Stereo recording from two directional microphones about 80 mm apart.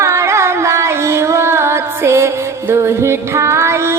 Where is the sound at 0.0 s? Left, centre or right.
Right.